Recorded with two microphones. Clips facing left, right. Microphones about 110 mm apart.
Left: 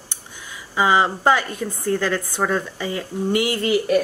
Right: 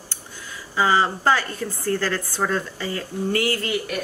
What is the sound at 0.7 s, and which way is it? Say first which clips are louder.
A woman's voice: left 2 dB; 15° left (ahead or behind).